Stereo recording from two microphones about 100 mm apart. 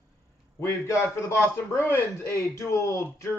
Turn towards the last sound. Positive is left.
turn(degrees=30)  # may be behind; listen again after turning